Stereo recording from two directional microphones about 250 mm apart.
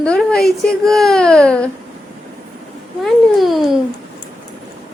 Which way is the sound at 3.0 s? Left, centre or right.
Centre.